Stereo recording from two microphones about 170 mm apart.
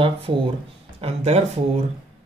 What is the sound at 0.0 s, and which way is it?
Speech, 30° right (ahead or behind).